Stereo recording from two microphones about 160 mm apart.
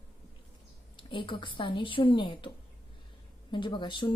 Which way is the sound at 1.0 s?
30° left (ahead or behind).